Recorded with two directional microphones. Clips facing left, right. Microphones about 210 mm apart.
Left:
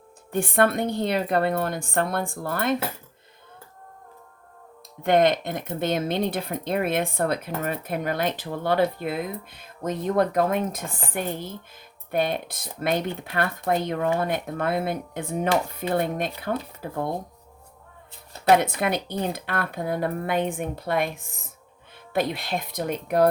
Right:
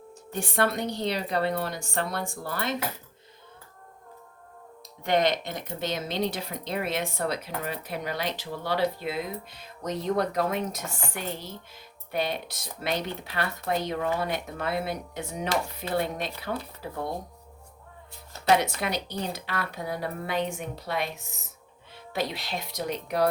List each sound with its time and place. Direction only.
0.3 s speech: 55° left (ahead or behind)
5.0 s speech: 55° left (ahead or behind)
18.4 s speech: 55° left (ahead or behind)